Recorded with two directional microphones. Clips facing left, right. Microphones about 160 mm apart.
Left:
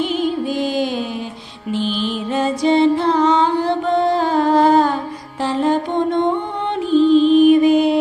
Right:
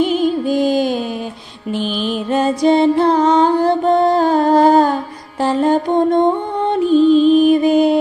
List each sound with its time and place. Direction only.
0.0 s music: 45° right (ahead or behind)
5.4 s mantra: 45° right (ahead or behind)
6.7 s music: 45° right (ahead or behind)